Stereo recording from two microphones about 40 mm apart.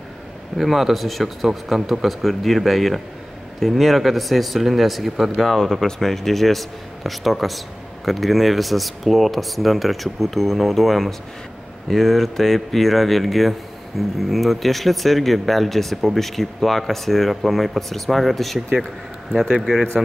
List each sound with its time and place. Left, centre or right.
0.6 s speech: centre
19.6 s speech: centre